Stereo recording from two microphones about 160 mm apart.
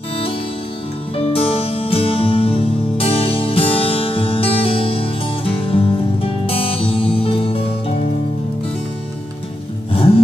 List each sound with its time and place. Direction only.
1.1 s music: 35° left (ahead or behind)